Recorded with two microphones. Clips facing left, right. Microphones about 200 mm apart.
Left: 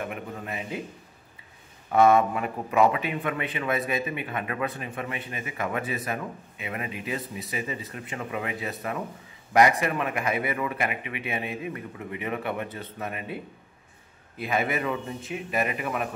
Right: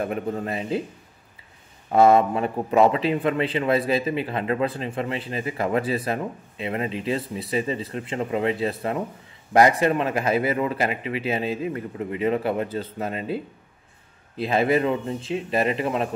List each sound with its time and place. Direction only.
0.0 s a man's voice: 35° right (ahead or behind)
1.9 s a man's voice: 30° right (ahead or behind)